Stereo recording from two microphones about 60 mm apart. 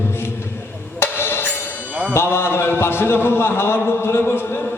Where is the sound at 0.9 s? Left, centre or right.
Left.